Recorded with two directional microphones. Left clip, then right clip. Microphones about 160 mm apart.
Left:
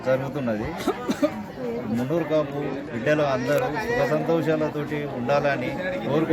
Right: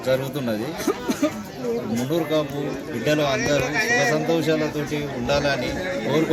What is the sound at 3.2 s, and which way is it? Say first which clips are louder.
Speech: right 1 dB; 45° left (ahead or behind).